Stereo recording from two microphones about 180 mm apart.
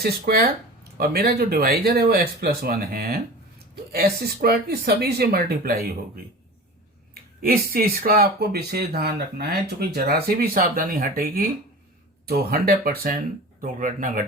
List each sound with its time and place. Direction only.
0.0 s speech: 55° right (ahead or behind)